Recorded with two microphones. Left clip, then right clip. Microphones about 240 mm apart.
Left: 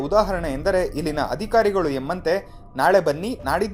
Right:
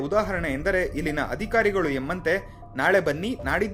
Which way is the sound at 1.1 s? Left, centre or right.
Centre.